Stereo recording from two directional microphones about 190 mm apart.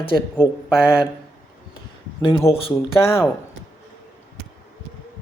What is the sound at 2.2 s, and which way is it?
Speech, 25° left (ahead or behind).